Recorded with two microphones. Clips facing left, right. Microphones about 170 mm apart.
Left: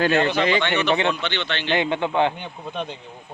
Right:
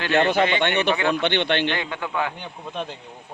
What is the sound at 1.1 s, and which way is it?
Speech, 55° right (ahead or behind).